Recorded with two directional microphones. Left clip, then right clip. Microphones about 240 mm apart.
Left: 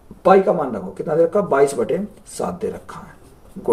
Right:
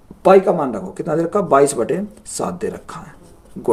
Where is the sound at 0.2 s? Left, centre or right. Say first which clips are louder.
Right 2 dB; right.